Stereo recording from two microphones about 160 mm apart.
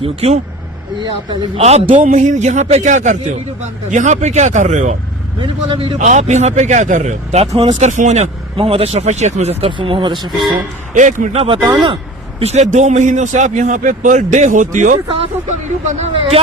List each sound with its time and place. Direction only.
0.0 s a man's voice: 40° right (ahead or behind)
0.9 s speech: 25° right (ahead or behind)
1.6 s speech: 40° right (ahead or behind)
5.4 s a man's voice: 35° right (ahead or behind)
6.0 s speech: 50° right (ahead or behind); by 10.3 s 30° right (ahead or behind)
10.9 s speech: 50° right (ahead or behind)
11.6 s speech: 25° right (ahead or behind)
12.4 s a man's voice: 40° right (ahead or behind)